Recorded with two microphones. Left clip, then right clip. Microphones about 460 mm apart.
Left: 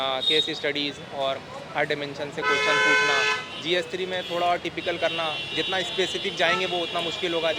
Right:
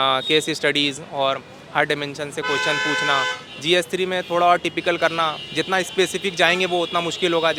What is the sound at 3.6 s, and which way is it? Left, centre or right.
Speech, right.